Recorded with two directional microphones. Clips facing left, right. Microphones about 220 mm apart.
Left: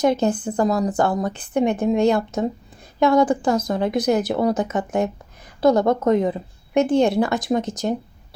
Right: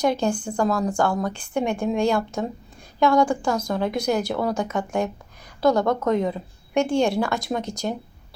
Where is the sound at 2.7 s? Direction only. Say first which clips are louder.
Even; 20° left (ahead or behind).